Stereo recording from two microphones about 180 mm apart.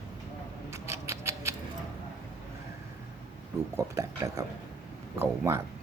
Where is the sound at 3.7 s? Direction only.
15° right (ahead or behind).